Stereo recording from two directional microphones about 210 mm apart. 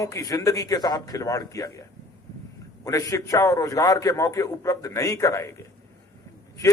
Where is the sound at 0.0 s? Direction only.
15° left (ahead or behind).